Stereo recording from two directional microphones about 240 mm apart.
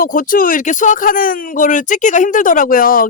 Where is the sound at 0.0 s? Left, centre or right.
Left.